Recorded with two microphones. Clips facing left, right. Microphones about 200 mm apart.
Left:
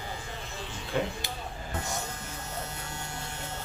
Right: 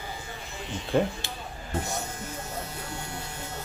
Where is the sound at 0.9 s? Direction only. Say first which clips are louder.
Right 6 dB; 45° right (ahead or behind).